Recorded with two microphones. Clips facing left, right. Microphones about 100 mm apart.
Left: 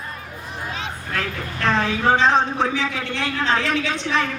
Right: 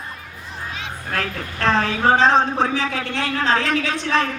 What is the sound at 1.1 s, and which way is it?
A woman's voice, 35° right (ahead or behind).